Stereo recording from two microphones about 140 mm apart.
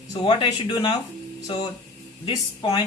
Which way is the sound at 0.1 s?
35° left (ahead or behind).